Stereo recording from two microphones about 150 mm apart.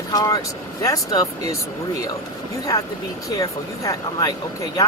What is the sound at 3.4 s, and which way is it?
Speech, 25° left (ahead or behind).